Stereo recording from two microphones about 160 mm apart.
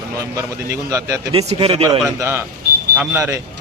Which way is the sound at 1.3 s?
40° right (ahead or behind).